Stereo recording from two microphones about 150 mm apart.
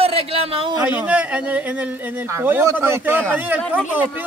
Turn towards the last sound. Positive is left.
turn(degrees=-10)  # may be behind; listen again after turning